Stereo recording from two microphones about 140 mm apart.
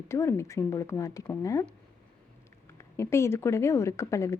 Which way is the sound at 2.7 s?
20° left (ahead or behind).